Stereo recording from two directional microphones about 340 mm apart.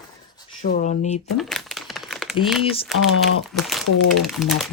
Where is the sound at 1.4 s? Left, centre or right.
Centre.